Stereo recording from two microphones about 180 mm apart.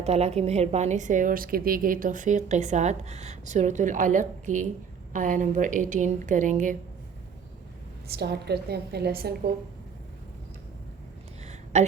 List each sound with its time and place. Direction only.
0.0 s a woman's voice: 35° right (ahead or behind)
8.1 s a woman's voice: 65° right (ahead or behind)
11.4 s a sound: 40° right (ahead or behind)